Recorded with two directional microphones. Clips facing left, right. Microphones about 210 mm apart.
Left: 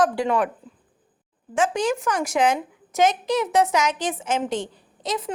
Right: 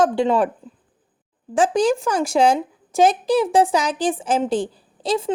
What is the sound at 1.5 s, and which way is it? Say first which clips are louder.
A woman's voice: right 5 dB; 35° right (ahead or behind).